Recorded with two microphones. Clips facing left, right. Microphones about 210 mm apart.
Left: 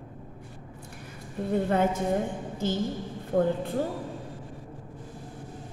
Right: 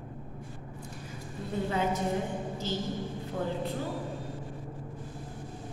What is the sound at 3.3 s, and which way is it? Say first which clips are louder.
Speech: left 10 dB; 50° left (ahead or behind).